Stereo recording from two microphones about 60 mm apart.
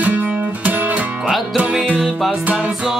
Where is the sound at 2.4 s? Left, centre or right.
Right.